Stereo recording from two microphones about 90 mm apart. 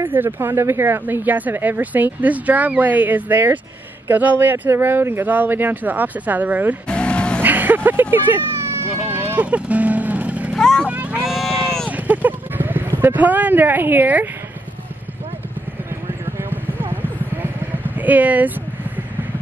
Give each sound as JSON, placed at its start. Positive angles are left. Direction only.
{"t": 0.0, "sound": "speech", "side_deg": -20}
{"t": 6.9, "sound": "vehicle", "side_deg": 10}
{"t": 7.4, "sound": "a sound", "side_deg": -20}
{"t": 9.1, "sound": "vehicle", "side_deg": -20}
{"t": 10.5, "sound": "vehicle", "side_deg": 5}
{"t": 10.9, "sound": "cattle", "side_deg": -15}
{"t": 11.2, "sound": "sheep", "side_deg": 0}
{"t": 12.1, "sound": "a sound", "side_deg": -20}
{"t": 16.4, "sound": "clip-clop", "side_deg": -20}